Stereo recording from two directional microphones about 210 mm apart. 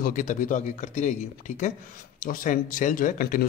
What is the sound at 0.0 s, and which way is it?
Speech, 35° left (ahead or behind).